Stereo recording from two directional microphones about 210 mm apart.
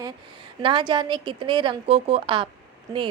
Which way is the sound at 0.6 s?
20° right (ahead or behind).